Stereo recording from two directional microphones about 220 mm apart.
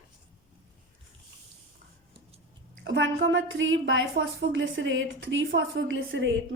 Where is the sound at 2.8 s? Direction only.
55° right (ahead or behind).